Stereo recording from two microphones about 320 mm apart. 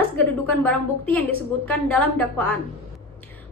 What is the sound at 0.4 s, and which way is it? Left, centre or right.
A woman's voice, centre.